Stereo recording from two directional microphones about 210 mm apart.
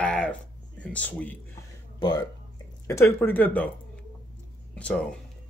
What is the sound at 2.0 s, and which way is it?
Speech, 20° left (ahead or behind).